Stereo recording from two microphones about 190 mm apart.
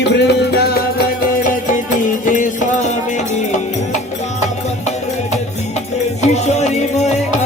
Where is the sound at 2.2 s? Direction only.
40° left (ahead or behind).